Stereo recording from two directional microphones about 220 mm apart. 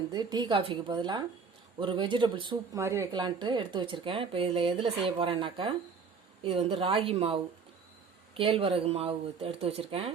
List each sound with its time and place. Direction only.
0.1 s speech: 20° right (ahead or behind)
8.4 s speech: 25° right (ahead or behind)